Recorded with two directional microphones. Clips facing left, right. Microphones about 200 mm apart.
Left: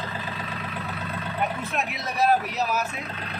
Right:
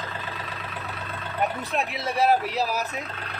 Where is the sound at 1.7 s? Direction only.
30° right (ahead or behind).